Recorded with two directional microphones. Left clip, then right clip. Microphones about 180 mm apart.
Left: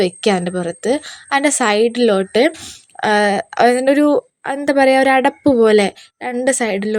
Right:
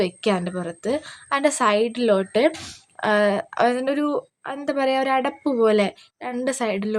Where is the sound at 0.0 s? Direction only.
25° left (ahead or behind).